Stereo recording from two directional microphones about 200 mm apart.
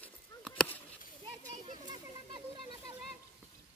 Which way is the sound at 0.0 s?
5° left (ahead or behind).